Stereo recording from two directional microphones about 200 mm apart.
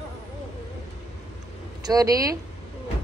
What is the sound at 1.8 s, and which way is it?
Speech, 20° right (ahead or behind).